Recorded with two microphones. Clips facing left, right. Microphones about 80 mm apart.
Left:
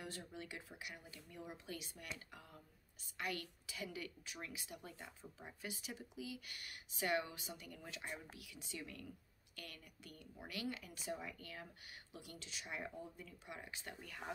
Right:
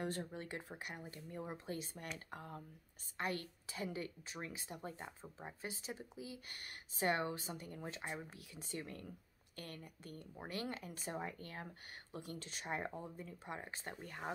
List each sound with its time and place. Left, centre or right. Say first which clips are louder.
0.0 s a woman's voice: right 7 dB; right